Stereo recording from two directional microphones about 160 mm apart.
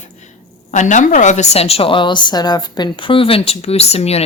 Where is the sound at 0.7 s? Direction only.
50° left (ahead or behind).